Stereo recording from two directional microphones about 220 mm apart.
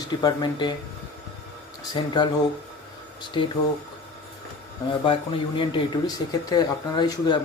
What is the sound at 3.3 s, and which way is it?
Speech, 20° left (ahead or behind).